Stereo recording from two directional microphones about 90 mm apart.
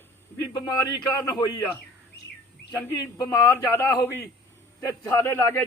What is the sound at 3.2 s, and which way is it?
A man's voice, 35° left (ahead or behind).